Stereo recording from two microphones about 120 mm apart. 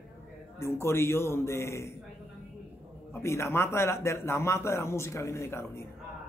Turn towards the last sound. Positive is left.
turn(degrees=20)  # may be behind; listen again after turning